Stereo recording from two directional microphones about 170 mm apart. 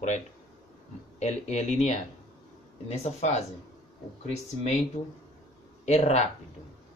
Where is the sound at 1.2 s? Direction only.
40° left (ahead or behind).